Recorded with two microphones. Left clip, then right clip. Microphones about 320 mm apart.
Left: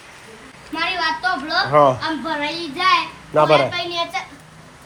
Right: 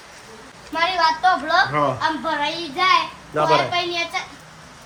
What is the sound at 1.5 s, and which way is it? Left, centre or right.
Speech, centre.